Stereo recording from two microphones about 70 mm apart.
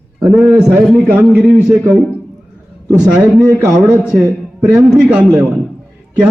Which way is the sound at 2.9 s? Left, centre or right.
Centre.